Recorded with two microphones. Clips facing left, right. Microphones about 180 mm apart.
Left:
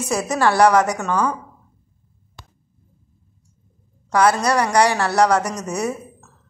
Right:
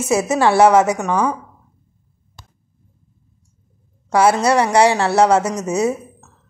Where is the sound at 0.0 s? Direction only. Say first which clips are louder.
Right 4 dB; 25° right (ahead or behind).